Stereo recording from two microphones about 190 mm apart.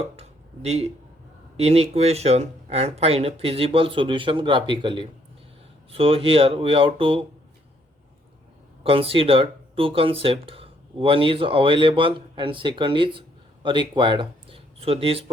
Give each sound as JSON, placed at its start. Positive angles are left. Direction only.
{"t": 0.2, "sound": "a sound", "side_deg": -35}
{"t": 1.5, "sound": "speech", "side_deg": -35}
{"t": 8.8, "sound": "speech", "side_deg": -30}